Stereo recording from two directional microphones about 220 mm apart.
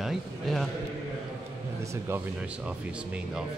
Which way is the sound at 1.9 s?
10° right (ahead or behind).